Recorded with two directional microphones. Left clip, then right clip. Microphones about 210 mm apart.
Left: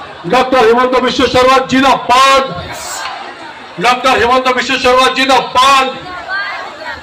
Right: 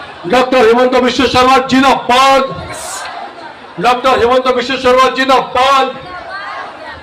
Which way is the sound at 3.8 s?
50° right (ahead or behind).